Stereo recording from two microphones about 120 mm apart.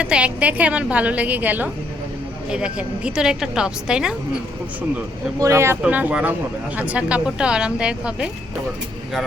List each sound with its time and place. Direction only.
0.0 s a woman's voice: 10° right (ahead or behind)
5.4 s speech: 25° right (ahead or behind)
5.8 s a woman's voice: 10° right (ahead or behind)